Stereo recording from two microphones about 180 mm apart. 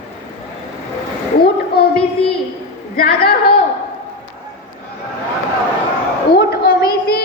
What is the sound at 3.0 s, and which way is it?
Speech, 60° left (ahead or behind).